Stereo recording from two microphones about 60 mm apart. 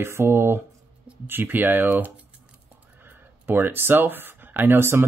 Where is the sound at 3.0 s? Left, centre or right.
Right.